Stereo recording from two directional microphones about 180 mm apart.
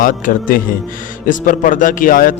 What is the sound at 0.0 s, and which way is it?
A man's voice, 50° left (ahead or behind).